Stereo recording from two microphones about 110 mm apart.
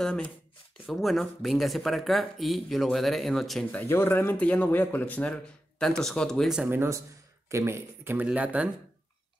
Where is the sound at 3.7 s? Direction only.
20° left (ahead or behind).